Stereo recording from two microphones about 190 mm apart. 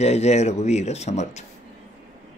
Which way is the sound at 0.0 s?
35° left (ahead or behind).